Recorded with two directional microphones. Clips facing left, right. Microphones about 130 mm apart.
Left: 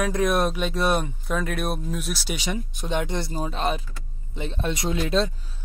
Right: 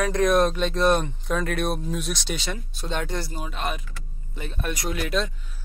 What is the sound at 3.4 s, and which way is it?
Speech, 30° left (ahead or behind).